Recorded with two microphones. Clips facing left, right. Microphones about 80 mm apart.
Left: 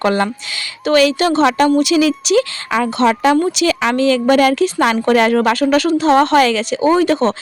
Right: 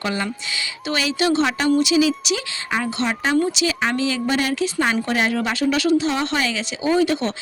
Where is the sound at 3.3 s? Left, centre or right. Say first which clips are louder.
Left 5 dB; left.